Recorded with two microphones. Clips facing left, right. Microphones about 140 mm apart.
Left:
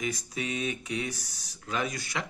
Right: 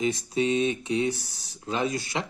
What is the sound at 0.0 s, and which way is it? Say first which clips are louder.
Speech: right 8 dB; 25° right (ahead or behind).